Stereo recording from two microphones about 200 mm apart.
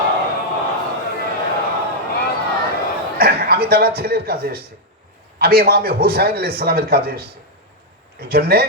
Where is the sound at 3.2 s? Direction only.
50° right (ahead or behind).